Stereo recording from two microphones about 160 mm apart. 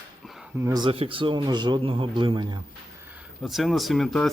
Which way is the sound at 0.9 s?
35° right (ahead or behind).